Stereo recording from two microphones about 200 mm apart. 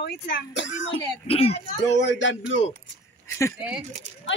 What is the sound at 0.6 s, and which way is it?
Speech, 70° left (ahead or behind).